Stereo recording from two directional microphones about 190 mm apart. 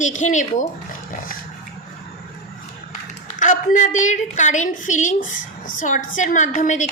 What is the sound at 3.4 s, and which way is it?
A woman's voice, 40° left (ahead or behind).